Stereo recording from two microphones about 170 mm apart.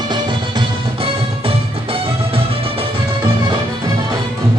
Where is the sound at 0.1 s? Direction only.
30° right (ahead or behind).